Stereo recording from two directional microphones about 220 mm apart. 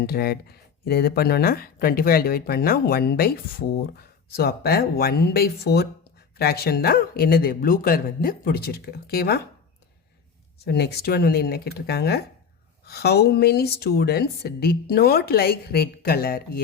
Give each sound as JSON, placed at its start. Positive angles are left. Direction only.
{"t": 0.0, "sound": "speech", "side_deg": 45}
{"t": 10.6, "sound": "speech", "side_deg": 45}